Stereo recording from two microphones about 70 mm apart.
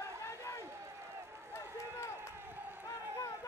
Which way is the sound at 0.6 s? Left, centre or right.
Right.